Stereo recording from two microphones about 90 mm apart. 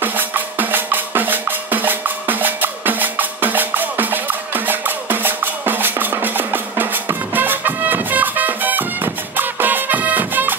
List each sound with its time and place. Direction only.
0.0 s music: 20° right (ahead or behind)